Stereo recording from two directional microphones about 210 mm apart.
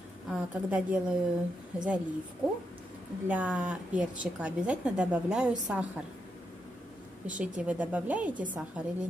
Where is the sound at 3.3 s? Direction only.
5° right (ahead or behind).